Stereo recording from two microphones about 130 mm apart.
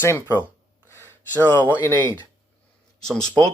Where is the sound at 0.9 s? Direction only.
20° left (ahead or behind).